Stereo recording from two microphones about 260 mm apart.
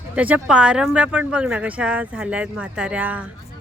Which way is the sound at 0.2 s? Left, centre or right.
Centre.